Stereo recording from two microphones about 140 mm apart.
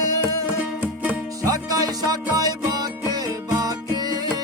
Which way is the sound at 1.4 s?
25° right (ahead or behind).